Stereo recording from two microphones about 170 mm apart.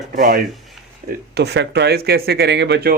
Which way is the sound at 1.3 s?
75° right (ahead or behind).